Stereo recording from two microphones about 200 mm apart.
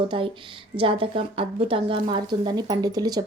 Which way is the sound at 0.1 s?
25° right (ahead or behind).